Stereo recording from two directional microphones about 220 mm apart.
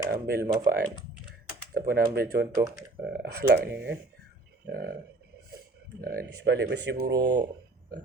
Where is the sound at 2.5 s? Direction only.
15° right (ahead or behind).